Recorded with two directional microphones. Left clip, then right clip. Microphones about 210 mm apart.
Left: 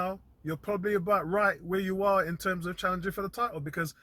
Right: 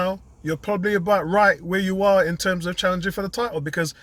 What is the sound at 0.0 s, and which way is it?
Speech, 10° right (ahead or behind).